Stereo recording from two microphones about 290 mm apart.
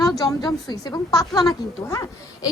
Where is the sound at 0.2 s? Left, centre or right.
Centre.